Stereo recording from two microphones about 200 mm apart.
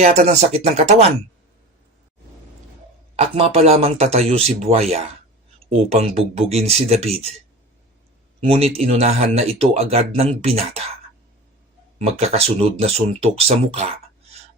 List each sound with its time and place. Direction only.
0.0 s speech: 35° right (ahead or behind)
3.2 s speech: 30° right (ahead or behind)
8.4 s speech: 30° right (ahead or behind)
11.9 s speech: 30° right (ahead or behind)